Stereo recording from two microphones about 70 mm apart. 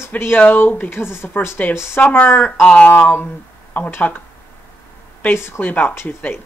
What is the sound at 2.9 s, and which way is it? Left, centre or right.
Speech, left.